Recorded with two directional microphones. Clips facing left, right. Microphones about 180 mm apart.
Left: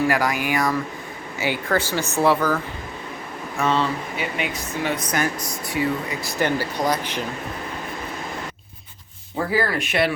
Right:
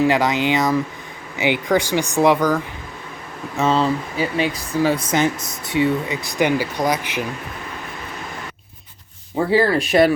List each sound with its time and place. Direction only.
0.0 s speech: 20° right (ahead or behind)
3.6 s speech: 35° right (ahead or behind); by 7.3 s 10° right (ahead or behind)
9.5 s speech: 30° right (ahead or behind)